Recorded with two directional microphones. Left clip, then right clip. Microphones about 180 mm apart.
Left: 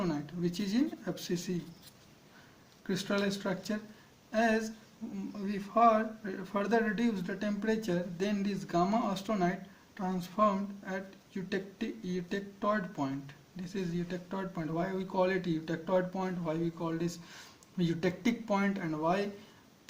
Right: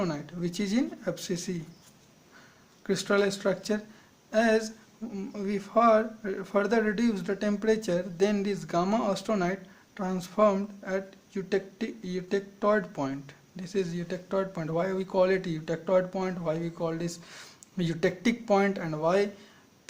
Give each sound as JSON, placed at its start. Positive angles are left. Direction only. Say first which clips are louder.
{"t": 0.0, "sound": "a man's voice", "louder": "right 3 dB", "side_deg": -40}
{"t": 2.8, "sound": "a man's voice", "louder": "right 7 dB", "side_deg": -35}